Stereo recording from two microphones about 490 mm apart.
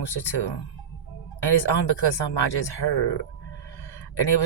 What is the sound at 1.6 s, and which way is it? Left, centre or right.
Speech, left.